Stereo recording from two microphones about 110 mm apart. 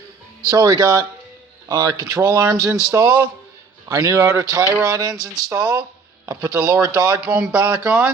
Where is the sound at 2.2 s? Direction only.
20° right (ahead or behind).